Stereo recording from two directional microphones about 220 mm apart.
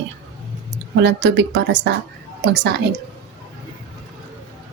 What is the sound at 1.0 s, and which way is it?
A woman's voice, 55° right (ahead or behind).